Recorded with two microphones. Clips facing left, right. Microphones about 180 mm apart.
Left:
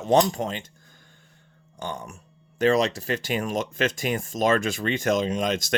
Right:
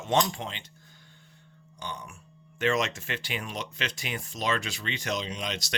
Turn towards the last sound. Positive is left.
turn(degrees=50)  # may be behind; listen again after turning